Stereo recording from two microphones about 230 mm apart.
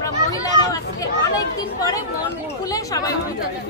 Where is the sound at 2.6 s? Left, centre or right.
Centre.